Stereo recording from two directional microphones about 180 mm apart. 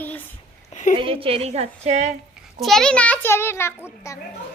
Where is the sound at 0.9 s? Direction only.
30° right (ahead or behind).